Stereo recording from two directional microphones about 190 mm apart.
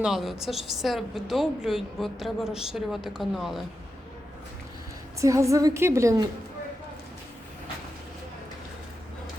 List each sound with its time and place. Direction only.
0.0 s a woman's voice: centre (ahead or behind)
5.2 s a woman's voice: 15° right (ahead or behind)